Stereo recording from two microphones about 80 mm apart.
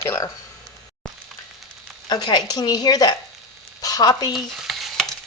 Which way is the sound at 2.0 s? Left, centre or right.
Left.